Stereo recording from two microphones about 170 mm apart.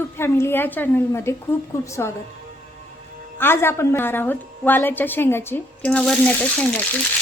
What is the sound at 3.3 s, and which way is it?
A woman's voice, 15° left (ahead or behind).